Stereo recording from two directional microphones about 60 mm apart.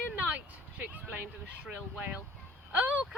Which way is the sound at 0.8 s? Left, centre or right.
Right.